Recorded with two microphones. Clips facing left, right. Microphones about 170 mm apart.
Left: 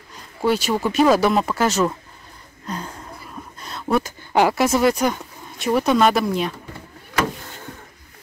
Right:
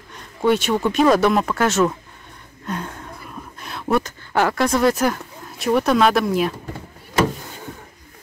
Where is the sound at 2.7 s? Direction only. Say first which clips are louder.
Right 2 dB; centre (ahead or behind).